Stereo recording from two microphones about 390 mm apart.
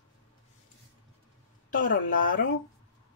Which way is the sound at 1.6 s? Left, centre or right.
Left.